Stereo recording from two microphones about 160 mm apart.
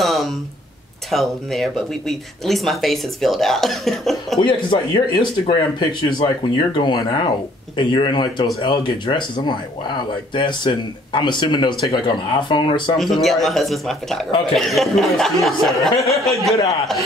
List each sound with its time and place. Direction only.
0.0 s a sound: centre (ahead or behind)
1.1 s speech: centre (ahead or behind)
4.6 s speech: 25° left (ahead or behind)
12.9 s speech: centre (ahead or behind)